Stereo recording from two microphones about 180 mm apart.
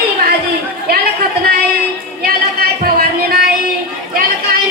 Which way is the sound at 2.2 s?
55° right (ahead or behind).